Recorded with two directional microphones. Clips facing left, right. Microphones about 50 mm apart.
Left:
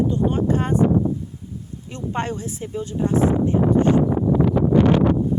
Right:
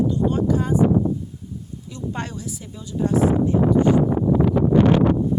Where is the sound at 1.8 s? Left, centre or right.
Left.